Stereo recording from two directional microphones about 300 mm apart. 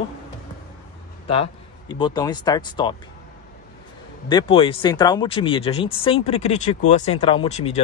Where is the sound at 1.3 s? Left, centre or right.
Centre.